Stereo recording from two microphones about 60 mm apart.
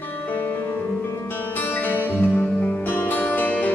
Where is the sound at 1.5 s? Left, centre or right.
Left.